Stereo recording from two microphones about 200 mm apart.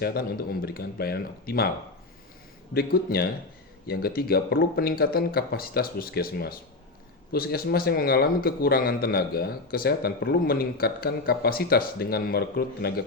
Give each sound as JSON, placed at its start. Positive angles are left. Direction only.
{"t": 0.0, "sound": "speech", "side_deg": 50}
{"t": 2.7, "sound": "speech", "side_deg": 50}